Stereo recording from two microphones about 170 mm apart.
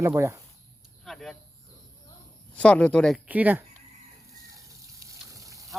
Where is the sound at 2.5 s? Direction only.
5° left (ahead or behind).